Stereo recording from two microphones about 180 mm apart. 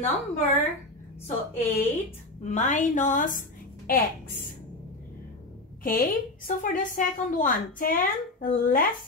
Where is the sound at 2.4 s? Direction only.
40° left (ahead or behind).